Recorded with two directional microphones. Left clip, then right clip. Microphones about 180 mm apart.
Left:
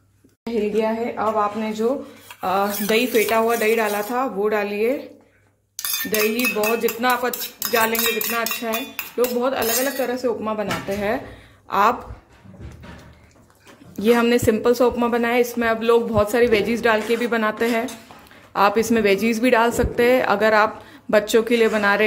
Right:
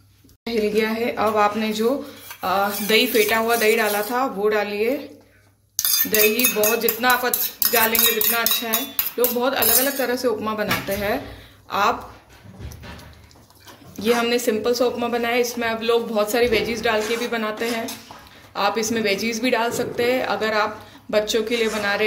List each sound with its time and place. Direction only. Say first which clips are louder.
0.5 s a woman's voice: right 1 dB; 10° left (ahead or behind)
1.0 s speech: right 2 dB; centre (ahead or behind)
2.4 s speech: even; 25° left (ahead or behind)
6.0 s cutlery: even; 15° left (ahead or behind)
11.6 s speech: left 2 dB; 35° left (ahead or behind)
13.9 s speech: left 3 dB; 35° left (ahead or behind)